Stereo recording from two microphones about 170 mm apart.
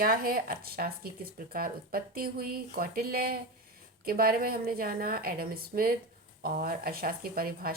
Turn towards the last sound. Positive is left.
turn(degrees=-60)  # may be behind; listen again after turning